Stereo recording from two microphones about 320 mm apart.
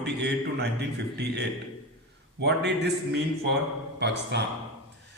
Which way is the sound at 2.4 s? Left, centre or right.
Right.